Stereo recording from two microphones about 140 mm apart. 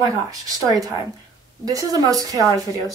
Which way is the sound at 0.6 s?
25° right (ahead or behind).